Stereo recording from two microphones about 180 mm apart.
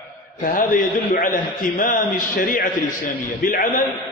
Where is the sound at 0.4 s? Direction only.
45° left (ahead or behind).